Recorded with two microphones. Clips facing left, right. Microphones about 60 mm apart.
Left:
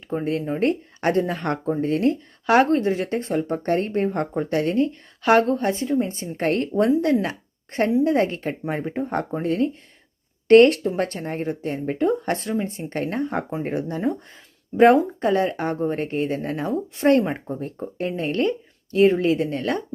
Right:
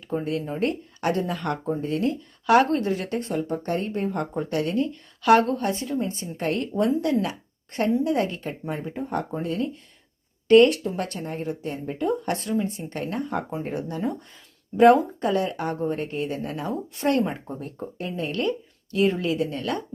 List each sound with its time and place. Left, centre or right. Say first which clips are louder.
0.3 s speech: left 6 dB; left
10.5 s speech: left 3 dB; left
10.8 s speech: left 5 dB; left